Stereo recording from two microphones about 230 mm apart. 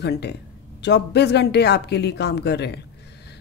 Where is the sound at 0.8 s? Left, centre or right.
Left.